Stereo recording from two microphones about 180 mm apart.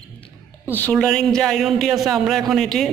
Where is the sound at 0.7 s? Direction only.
10° left (ahead or behind).